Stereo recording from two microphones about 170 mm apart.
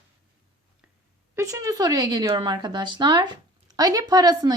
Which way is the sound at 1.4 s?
20° right (ahead or behind).